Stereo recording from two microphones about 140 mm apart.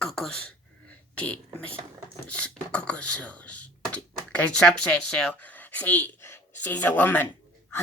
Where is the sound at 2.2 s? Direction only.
10° left (ahead or behind).